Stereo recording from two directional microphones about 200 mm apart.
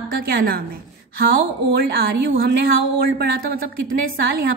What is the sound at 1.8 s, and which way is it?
A woman's voice, 50° right (ahead or behind).